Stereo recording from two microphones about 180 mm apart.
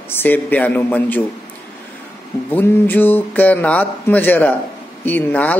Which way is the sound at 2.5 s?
10° left (ahead or behind).